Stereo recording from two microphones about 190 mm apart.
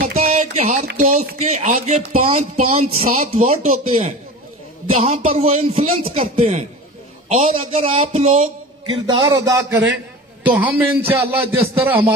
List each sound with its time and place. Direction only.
0.0 s a sound: 35° right (ahead or behind)
0.9 s speech: 40° right (ahead or behind)
8.8 s a man's voice: 25° right (ahead or behind)